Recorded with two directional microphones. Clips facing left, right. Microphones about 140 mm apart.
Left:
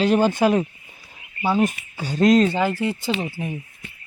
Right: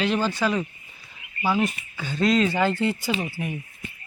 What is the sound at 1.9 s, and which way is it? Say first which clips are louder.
Speech: left 6 dB; 40° left (ahead or behind).